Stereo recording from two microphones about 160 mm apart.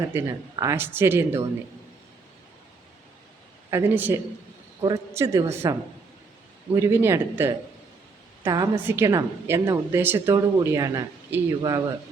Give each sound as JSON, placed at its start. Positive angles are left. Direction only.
{"t": 0.1, "sound": "a woman's voice", "side_deg": -15}
{"t": 3.7, "sound": "a woman's voice", "side_deg": -15}
{"t": 6.7, "sound": "a woman's voice", "side_deg": -15}
{"t": 8.4, "sound": "speech", "side_deg": -25}
{"t": 8.7, "sound": "a woman's voice", "side_deg": -15}